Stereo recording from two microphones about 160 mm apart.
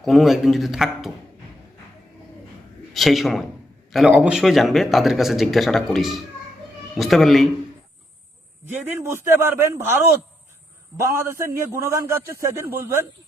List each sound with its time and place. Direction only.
0.0 s speech: centre (ahead or behind)
2.9 s a man's voice: centre (ahead or behind)
8.7 s a man's voice: 15° right (ahead or behind)
11.2 s a man's voice: 15° right (ahead or behind)